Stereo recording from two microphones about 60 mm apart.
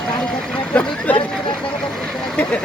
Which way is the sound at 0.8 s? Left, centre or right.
Left.